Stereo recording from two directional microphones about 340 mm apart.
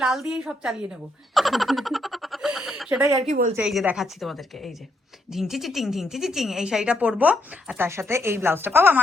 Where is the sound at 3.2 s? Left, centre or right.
Right.